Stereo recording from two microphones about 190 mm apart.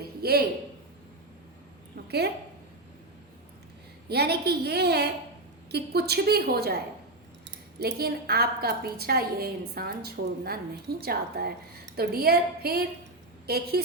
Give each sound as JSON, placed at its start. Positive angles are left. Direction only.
{"t": 0.0, "sound": "a sound", "side_deg": -55}
{"t": 2.0, "sound": "a woman's voice", "side_deg": -60}
{"t": 4.1, "sound": "a woman's voice", "side_deg": -60}
{"t": 7.8, "sound": "a woman's voice", "side_deg": -55}